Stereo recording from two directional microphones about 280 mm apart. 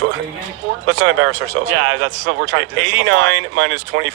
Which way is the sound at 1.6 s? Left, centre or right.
Right.